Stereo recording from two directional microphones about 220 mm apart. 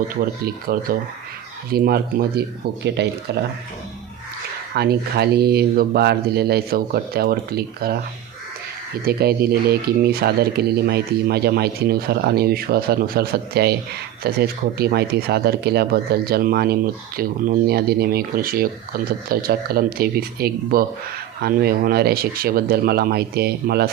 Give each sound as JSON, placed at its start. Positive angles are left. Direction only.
{"t": 0.2, "sound": "speech", "side_deg": -40}
{"t": 4.7, "sound": "speech", "side_deg": -45}
{"t": 9.0, "sound": "speech", "side_deg": -45}